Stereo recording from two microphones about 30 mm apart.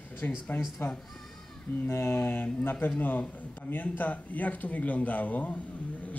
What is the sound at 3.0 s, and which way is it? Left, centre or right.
Speech, left.